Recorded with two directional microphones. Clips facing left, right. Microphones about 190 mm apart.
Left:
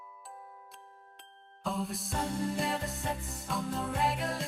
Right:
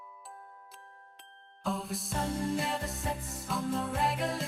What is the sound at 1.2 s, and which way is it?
Music, centre (ahead or behind).